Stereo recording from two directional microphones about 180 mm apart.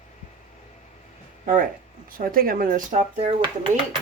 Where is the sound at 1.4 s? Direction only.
45° right (ahead or behind).